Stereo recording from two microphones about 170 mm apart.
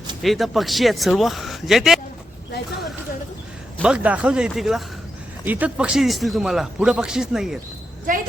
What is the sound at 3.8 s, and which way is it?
A man's voice, 5° right (ahead or behind).